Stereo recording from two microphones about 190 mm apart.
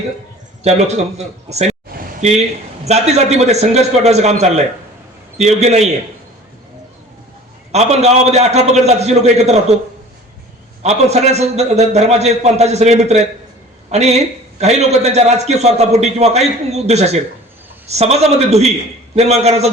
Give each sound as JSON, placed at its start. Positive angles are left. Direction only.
{"t": 0.6, "sound": "a man's voice", "side_deg": -35}
{"t": 2.8, "sound": "a man's voice", "side_deg": -35}
{"t": 7.7, "sound": "a man's voice", "side_deg": -35}
{"t": 10.8, "sound": "a man's voice", "side_deg": -35}